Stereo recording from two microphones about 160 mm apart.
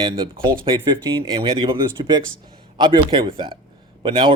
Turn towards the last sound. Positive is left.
turn(degrees=-30)  # may be behind; listen again after turning